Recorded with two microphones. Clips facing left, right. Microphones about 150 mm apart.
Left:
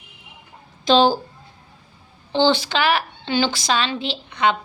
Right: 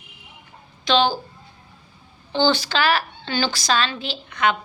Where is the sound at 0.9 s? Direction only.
40° left (ahead or behind).